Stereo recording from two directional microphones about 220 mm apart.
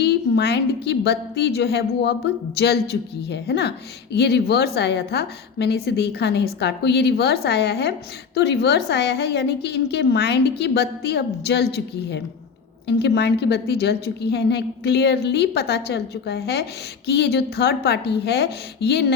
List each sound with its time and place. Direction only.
0.0 s a woman's voice: 50° left (ahead or behind)